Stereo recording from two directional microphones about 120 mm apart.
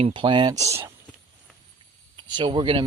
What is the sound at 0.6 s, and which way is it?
Speech, 25° right (ahead or behind).